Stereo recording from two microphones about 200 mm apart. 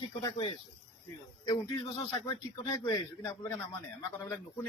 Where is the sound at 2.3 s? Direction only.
20° left (ahead or behind).